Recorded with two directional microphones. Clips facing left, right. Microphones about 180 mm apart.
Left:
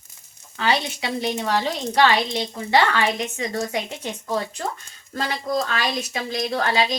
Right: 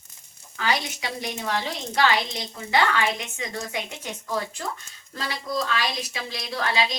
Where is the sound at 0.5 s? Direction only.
30° left (ahead or behind).